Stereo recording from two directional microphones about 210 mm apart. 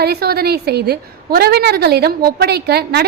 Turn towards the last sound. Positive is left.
turn(degrees=-50)  # may be behind; listen again after turning